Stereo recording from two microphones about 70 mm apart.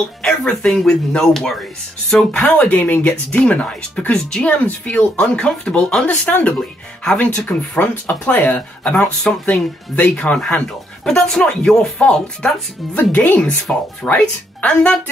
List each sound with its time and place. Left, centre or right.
0.2 s speech: centre
2.3 s speech: left
4.6 s speech: left; by 7.2 s centre
7.2 s speech: centre
9.3 s speech: centre
12.9 s speech: left